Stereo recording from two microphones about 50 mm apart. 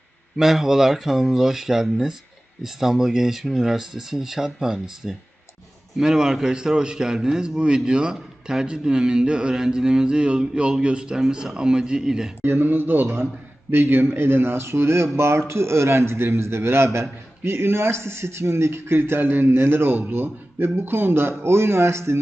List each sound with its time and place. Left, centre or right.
0.3 s a man's voice: centre
12.4 s a man's voice: right